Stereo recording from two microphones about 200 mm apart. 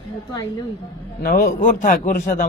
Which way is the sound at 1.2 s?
50° left (ahead or behind).